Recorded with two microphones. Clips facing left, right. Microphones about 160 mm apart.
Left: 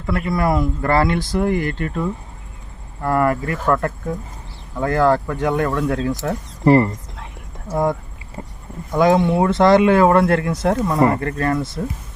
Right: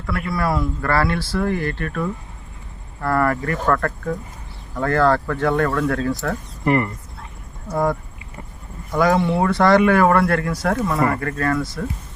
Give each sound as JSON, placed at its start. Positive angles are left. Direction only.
{"t": 0.0, "sound": "speech", "side_deg": 20}
{"t": 6.2, "sound": "speech", "side_deg": 30}
{"t": 8.4, "sound": "speech", "side_deg": 25}